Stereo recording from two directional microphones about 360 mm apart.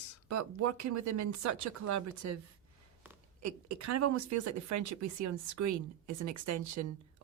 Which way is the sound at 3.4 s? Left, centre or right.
Right.